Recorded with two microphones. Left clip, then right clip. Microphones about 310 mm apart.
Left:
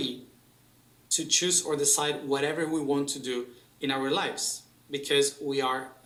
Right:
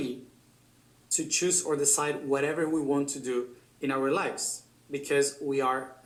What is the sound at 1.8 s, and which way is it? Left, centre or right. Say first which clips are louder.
Speech: left 1 dB; left.